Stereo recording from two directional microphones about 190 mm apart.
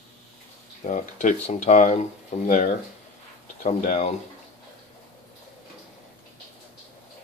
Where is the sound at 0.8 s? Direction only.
40° left (ahead or behind).